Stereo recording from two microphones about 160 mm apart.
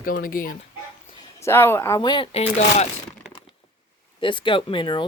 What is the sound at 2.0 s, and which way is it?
Speech, 30° left (ahead or behind).